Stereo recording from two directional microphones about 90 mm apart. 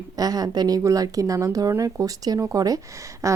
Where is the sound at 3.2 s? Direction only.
35° right (ahead or behind).